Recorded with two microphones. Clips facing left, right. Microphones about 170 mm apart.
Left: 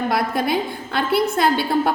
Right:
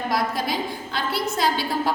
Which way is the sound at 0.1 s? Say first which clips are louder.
Left 2 dB; 60° left (ahead or behind).